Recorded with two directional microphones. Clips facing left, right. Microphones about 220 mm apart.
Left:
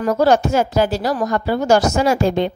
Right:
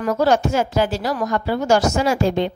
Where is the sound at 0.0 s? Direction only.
35° left (ahead or behind).